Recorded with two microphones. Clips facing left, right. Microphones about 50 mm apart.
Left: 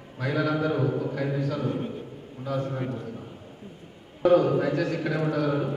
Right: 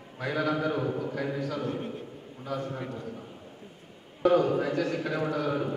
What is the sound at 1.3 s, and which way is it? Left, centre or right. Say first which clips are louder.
Speech: left 3 dB; centre.